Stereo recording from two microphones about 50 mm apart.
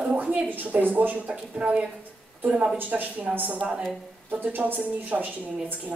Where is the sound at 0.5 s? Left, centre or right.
Right.